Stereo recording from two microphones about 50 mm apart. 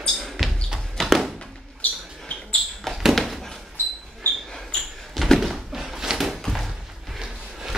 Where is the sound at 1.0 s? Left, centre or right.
Centre.